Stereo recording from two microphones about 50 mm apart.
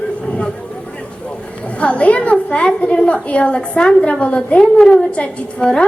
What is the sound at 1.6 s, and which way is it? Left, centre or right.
A woman's voice, left.